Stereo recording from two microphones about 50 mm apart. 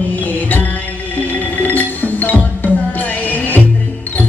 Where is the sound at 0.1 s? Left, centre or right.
Left.